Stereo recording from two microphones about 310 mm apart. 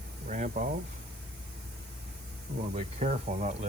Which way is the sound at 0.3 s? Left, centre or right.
Right.